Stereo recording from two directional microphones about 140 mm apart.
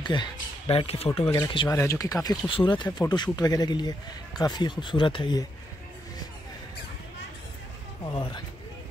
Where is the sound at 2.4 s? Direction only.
35° left (ahead or behind).